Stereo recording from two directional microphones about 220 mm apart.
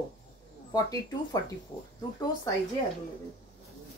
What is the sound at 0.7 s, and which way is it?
A woman's voice, 15° left (ahead or behind).